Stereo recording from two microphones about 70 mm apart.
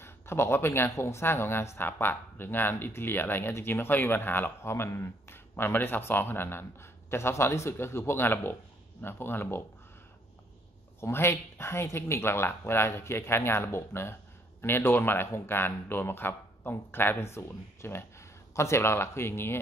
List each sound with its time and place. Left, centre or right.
0.0 s speech: left
11.0 s speech: left